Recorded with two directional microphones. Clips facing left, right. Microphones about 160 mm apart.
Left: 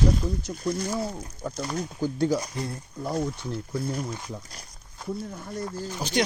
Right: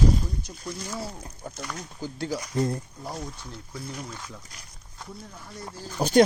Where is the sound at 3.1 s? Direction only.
55° left (ahead or behind).